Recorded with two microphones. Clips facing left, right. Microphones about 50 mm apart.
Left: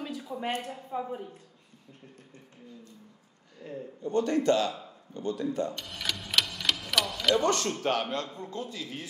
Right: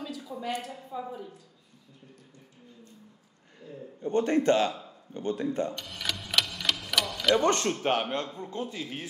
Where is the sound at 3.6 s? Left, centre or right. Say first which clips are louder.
Left 4 dB; left.